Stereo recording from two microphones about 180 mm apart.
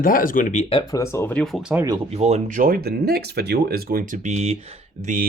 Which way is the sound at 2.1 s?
40° right (ahead or behind).